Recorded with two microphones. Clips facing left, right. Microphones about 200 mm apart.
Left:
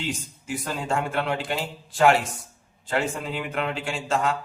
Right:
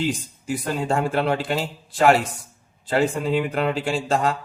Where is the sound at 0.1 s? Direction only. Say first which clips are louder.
Right 5 dB; 35° right (ahead or behind).